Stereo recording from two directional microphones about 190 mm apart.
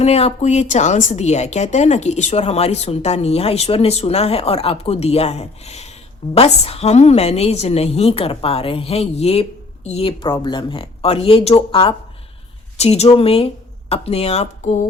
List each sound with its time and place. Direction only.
0.0 s a woman's voice: 35° left (ahead or behind)